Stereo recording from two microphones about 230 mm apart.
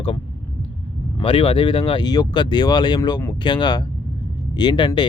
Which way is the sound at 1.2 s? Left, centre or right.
Left.